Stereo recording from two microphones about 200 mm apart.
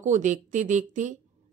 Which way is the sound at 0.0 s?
40° right (ahead or behind).